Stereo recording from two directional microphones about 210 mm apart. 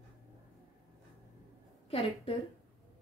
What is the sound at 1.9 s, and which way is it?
Speech, 25° left (ahead or behind).